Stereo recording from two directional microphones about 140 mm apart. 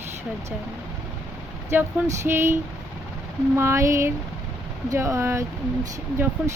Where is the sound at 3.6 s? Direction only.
20° right (ahead or behind).